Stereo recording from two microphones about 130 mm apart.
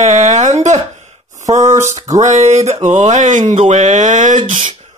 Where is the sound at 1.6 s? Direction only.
20° right (ahead or behind).